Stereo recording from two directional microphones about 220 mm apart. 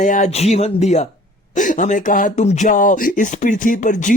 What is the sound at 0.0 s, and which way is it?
Speech, 35° left (ahead or behind).